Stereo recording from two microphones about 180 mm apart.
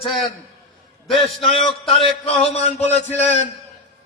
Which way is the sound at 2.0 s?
35° left (ahead or behind).